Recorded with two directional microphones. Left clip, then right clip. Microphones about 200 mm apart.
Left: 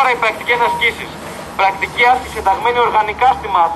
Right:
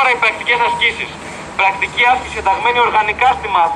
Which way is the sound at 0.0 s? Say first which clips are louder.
Right 1 dB; 5° left (ahead or behind).